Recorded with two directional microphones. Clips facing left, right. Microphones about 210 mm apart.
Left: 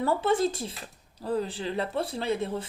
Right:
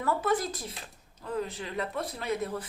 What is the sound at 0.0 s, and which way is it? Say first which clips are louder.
Speech: left 4 dB; 30° left (ahead or behind).